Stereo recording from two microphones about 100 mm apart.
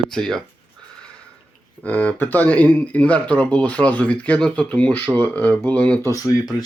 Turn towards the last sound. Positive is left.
turn(degrees=35)  # may be behind; listen again after turning